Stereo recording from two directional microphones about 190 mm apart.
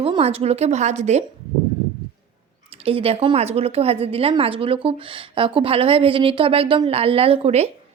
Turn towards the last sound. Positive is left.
turn(degrees=-35)  # may be behind; listen again after turning